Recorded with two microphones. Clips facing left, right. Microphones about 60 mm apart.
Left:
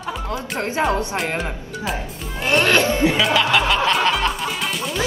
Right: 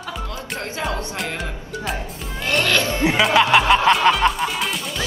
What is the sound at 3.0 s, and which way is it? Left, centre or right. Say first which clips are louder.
Music: even; centre.